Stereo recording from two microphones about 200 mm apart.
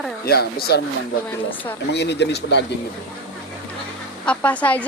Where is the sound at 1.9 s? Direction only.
60° left (ahead or behind).